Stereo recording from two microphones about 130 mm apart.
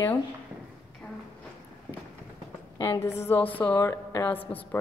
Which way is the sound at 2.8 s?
20° left (ahead or behind).